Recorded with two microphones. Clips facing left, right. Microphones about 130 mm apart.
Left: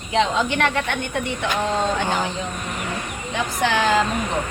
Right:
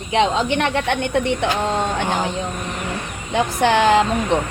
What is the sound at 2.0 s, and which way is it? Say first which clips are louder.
Speech: right 1 dB; 15° right (ahead or behind).